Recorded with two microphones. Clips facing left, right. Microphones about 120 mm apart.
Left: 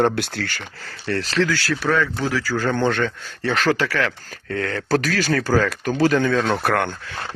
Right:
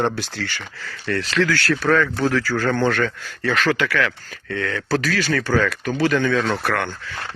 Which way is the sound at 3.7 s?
35° left (ahead or behind).